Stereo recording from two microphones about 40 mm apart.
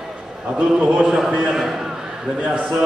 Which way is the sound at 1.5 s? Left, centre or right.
Centre.